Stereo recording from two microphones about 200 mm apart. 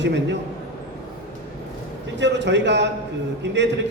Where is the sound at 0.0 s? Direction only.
60° right (ahead or behind).